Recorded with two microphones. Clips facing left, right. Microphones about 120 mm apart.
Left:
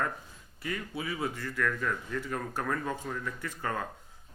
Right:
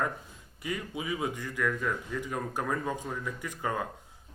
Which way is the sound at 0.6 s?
15° right (ahead or behind).